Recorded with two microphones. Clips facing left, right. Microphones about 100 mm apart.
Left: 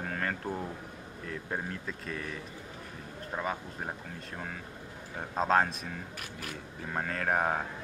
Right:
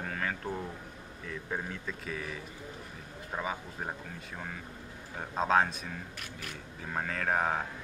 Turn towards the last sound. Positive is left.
turn(degrees=5)  # may be behind; listen again after turning